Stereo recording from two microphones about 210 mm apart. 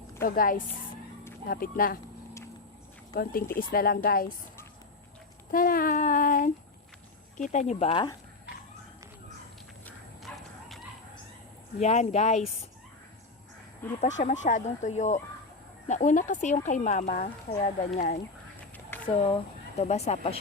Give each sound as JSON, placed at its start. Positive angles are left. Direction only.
{"t": 0.3, "sound": "speech", "side_deg": 40}
{"t": 3.7, "sound": "speech", "side_deg": 45}
{"t": 5.5, "sound": "speech", "side_deg": 40}
{"t": 9.8, "sound": "bow-wow", "side_deg": 0}
{"t": 11.8, "sound": "speech", "side_deg": 30}
{"t": 14.0, "sound": "speech", "side_deg": 35}
{"t": 19.0, "sound": "speech", "side_deg": 25}